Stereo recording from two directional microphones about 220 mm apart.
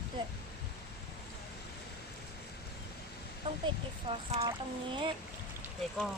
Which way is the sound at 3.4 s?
25° right (ahead or behind).